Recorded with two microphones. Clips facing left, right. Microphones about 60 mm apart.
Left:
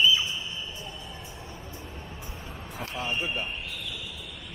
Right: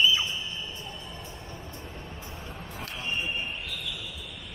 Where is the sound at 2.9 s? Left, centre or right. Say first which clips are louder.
Left 2 dB; centre.